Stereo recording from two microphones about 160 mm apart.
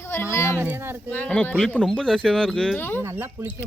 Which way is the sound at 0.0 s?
15° left (ahead or behind).